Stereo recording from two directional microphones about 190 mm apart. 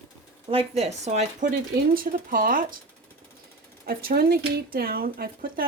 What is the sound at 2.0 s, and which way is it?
Speech, 45° right (ahead or behind).